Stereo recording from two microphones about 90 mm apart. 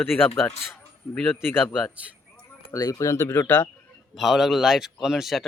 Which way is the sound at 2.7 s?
40° left (ahead or behind).